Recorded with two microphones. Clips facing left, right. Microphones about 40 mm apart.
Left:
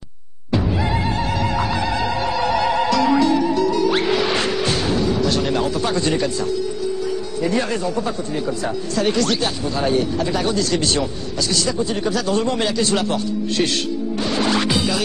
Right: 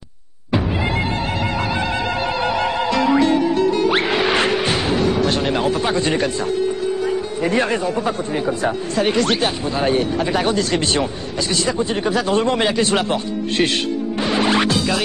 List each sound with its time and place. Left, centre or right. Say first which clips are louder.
2.9 s music: right 2 dB; right
5.0 s speech: right 1 dB; right
7.4 s speech: right 2 dB; right
14.2 s music: right 3 dB; right